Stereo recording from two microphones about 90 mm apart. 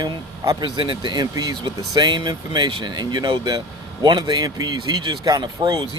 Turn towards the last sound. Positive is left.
turn(degrees=-50)  # may be behind; listen again after turning